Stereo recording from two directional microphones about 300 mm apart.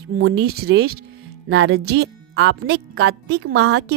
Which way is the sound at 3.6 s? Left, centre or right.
Right.